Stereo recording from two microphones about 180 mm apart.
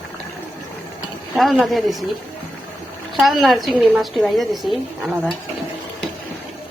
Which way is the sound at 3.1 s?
Centre (ahead or behind).